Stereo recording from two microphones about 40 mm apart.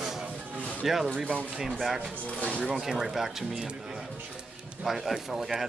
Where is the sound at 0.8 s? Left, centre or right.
Centre.